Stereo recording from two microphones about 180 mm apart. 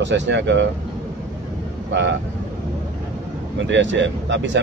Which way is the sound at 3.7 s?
85° right.